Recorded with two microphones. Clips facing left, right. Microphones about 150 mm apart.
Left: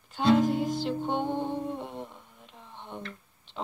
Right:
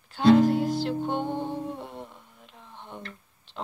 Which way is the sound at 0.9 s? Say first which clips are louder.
Right 2 dB; 10° right (ahead or behind).